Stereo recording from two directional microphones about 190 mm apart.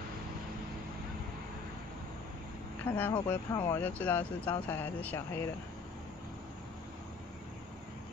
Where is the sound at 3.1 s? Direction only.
20° left (ahead or behind).